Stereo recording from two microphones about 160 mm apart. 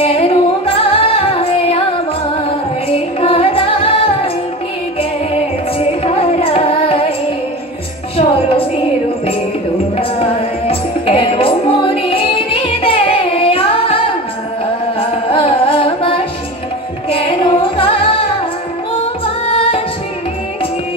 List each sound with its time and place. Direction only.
0.0 s music: 35° left (ahead or behind)
2.9 s music: 35° left (ahead or behind)
5.3 s carnatic music: 40° left (ahead or behind)
8.2 s music: 35° left (ahead or behind)
9.9 s music: 35° left (ahead or behind)
17.1 s singing: 35° left (ahead or behind)
19.2 s music: 35° left (ahead or behind)